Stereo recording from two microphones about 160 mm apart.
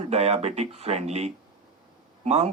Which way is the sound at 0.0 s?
40° right (ahead or behind).